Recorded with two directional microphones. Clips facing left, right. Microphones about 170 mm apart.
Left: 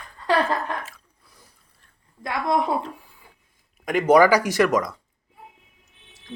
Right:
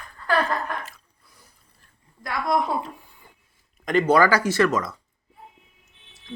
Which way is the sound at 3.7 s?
10° left (ahead or behind).